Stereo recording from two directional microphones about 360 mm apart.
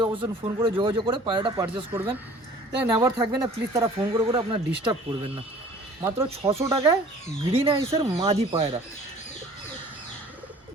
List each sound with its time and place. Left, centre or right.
0.0 s speech: centre